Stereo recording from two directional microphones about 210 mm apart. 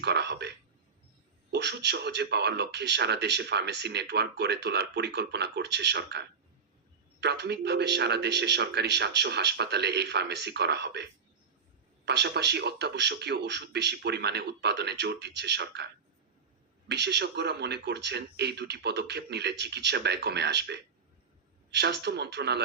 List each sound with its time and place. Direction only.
0.0 s speech: 55° right (ahead or behind)
12.0 s speech: 55° right (ahead or behind)
16.9 s speech: 55° right (ahead or behind)